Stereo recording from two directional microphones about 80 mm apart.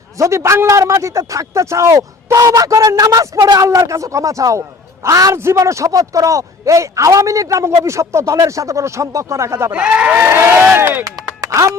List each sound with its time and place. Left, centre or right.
0.2 s a man's voice: right
3.7 s a man's voice: right
9.7 s speech: centre
10.2 s speech: right
11.0 s music: right